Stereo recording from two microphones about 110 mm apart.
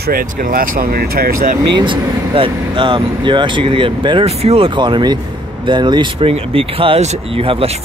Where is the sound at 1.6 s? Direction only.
45° right (ahead or behind).